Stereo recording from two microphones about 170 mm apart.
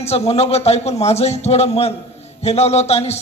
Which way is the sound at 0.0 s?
35° left (ahead or behind).